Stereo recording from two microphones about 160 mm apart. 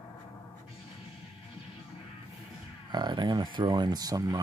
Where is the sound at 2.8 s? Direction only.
25° right (ahead or behind).